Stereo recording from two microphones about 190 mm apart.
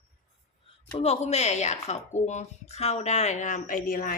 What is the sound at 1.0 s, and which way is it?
Speech, 35° left (ahead or behind).